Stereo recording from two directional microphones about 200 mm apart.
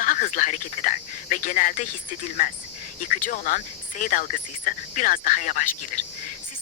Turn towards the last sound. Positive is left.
turn(degrees=40)  # may be behind; listen again after turning